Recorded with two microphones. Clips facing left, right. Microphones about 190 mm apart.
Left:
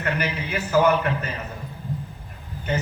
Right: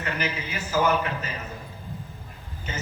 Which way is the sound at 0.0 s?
60° left (ahead or behind).